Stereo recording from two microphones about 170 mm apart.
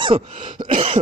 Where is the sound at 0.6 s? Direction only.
30° right (ahead or behind).